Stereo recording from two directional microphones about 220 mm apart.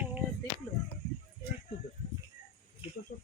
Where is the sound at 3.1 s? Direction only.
40° left (ahead or behind).